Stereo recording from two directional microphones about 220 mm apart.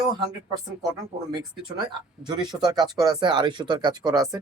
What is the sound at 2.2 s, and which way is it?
Speech, 5° right (ahead or behind).